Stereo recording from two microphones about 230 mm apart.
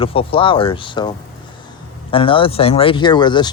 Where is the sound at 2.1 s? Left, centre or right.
Left.